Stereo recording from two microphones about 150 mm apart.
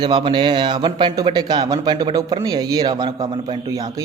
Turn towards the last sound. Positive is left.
turn(degrees=-25)  # may be behind; listen again after turning